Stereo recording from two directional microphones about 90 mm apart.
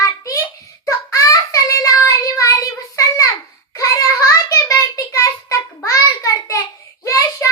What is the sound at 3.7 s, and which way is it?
Child singing, 35° left (ahead or behind).